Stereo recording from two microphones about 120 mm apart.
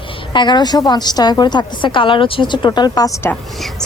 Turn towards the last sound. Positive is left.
turn(degrees=30)  # may be behind; listen again after turning